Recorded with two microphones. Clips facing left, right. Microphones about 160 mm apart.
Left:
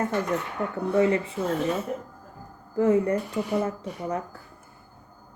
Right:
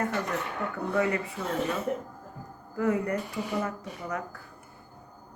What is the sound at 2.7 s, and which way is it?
Speech, 25° left (ahead or behind).